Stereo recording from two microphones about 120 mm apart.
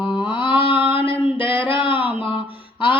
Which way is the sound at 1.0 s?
45° left (ahead or behind).